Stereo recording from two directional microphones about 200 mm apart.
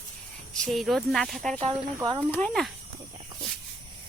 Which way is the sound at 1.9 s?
20° right (ahead or behind).